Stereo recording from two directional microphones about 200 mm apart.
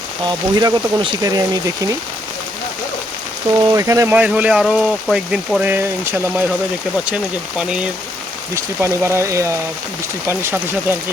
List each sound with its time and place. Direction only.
0.3 s speech: 20° right (ahead or behind)
3.7 s speech: 15° right (ahead or behind)
7.6 s speech: 5° right (ahead or behind)